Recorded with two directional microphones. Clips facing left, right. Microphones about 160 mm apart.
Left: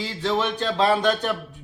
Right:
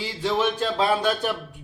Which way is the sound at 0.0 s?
10° right (ahead or behind).